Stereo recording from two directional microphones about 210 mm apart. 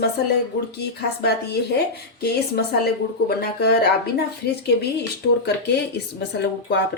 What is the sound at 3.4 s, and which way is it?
Speech, 50° left (ahead or behind).